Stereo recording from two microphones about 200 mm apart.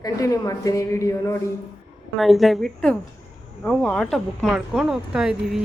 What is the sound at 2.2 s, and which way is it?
Speech, centre (ahead or behind).